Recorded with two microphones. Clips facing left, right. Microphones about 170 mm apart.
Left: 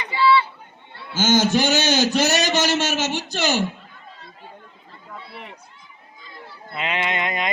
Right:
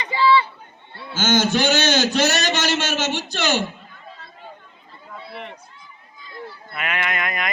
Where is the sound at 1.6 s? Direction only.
40° left (ahead or behind).